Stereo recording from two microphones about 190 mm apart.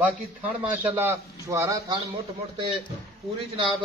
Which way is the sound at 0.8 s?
10° right (ahead or behind).